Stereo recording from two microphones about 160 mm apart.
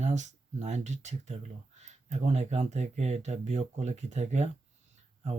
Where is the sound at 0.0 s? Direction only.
45° right (ahead or behind).